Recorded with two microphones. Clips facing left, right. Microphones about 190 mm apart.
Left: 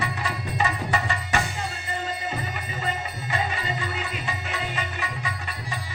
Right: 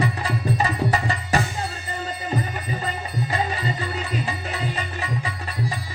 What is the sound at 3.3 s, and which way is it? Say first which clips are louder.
Music: right 1 dB; 35° right (ahead or behind).